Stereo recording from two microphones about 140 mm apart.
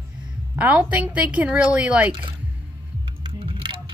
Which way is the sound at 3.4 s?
40° right (ahead or behind).